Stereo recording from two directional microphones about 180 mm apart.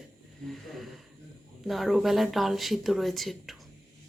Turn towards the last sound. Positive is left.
turn(degrees=0)  # may be behind; listen again after turning